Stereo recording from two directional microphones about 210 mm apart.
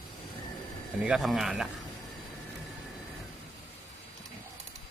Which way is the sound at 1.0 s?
Centre (ahead or behind).